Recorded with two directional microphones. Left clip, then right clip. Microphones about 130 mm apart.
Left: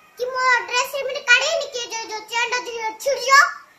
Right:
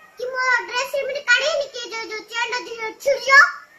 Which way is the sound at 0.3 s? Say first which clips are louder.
Left 2 dB; 40° left (ahead or behind).